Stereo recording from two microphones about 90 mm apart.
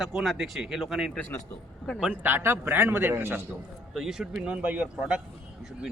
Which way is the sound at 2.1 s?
20° right (ahead or behind).